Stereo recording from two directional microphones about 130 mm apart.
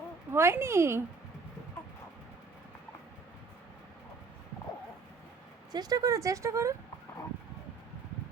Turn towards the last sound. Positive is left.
turn(degrees=-25)  # may be behind; listen again after turning